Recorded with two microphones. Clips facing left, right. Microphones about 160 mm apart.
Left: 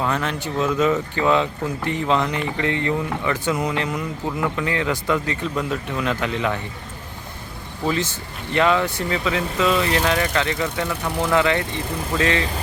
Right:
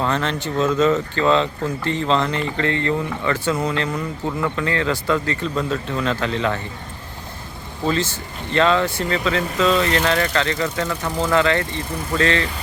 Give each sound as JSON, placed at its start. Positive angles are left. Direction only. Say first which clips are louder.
{"t": 0.0, "sound": "speech", "louder": "right 2 dB", "side_deg": 10}
{"t": 7.9, "sound": "speech", "louder": "right 2 dB", "side_deg": 15}